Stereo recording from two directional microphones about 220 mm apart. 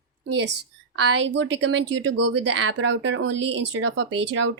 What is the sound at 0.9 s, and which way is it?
Speech, 55° right (ahead or behind).